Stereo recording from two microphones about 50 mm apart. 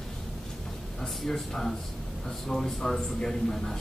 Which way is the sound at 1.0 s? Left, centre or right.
Centre.